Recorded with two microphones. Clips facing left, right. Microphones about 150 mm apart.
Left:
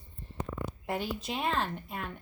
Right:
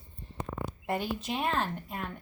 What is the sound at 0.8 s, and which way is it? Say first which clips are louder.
A woman's voice: right 2 dB; centre (ahead or behind).